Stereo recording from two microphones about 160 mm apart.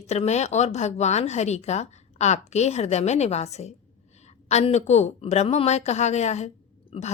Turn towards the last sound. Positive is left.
turn(degrees=40)  # may be behind; listen again after turning